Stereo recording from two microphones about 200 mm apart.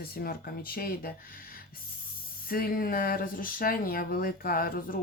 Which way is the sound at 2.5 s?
45° left (ahead or behind).